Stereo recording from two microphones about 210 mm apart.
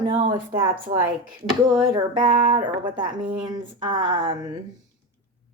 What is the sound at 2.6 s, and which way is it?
Speech, 20° right (ahead or behind).